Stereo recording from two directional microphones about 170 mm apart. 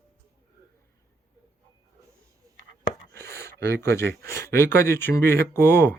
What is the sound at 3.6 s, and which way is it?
Speech, 15° left (ahead or behind).